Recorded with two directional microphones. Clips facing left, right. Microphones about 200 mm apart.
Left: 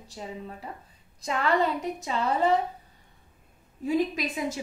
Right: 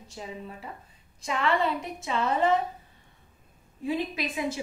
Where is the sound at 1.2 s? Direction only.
40° left (ahead or behind).